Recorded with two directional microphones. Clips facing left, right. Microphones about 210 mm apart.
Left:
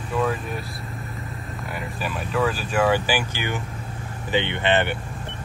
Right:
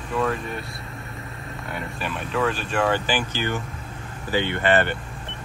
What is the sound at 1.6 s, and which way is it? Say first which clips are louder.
Speech: even; 5° left (ahead or behind).